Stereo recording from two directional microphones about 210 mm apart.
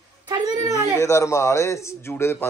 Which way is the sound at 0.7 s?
15° left (ahead or behind).